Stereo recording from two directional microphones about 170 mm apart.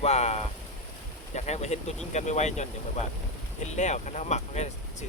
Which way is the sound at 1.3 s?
40° left (ahead or behind).